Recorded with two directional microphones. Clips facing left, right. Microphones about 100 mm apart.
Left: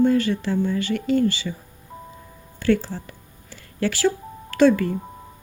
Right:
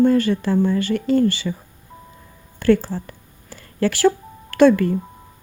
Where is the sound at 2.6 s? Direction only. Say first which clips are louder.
Right 4 dB; 45° right (ahead or behind).